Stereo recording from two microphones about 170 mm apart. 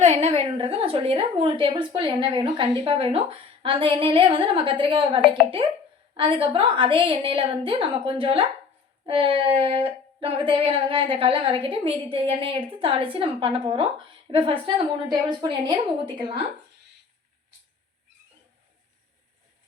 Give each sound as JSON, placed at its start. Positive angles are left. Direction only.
{"t": 0.0, "sound": "a woman's voice", "side_deg": -40}